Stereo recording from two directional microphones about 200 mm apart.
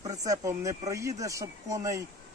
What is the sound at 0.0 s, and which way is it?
Speech, 15° right (ahead or behind).